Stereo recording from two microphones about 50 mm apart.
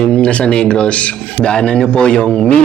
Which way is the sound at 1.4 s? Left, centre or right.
Centre.